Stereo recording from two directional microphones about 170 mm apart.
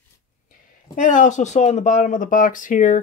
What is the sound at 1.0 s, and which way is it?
Speech, 50° left (ahead or behind).